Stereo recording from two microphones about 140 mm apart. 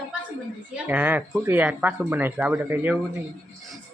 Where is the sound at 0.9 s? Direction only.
10° right (ahead or behind).